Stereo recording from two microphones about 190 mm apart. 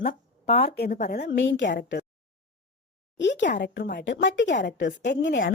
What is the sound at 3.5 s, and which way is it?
A woman's voice, 60° left (ahead or behind).